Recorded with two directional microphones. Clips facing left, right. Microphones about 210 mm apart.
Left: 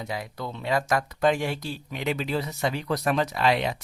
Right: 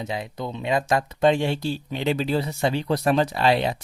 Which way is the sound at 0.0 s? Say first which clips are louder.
Right 3 dB; 25° right (ahead or behind).